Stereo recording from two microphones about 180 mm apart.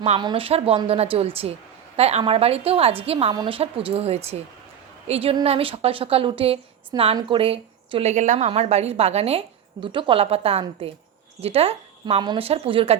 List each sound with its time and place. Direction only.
0.2 s a woman's voice: 25° right (ahead or behind)